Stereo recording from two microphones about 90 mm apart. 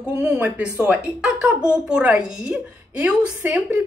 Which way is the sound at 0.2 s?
20° right (ahead or behind).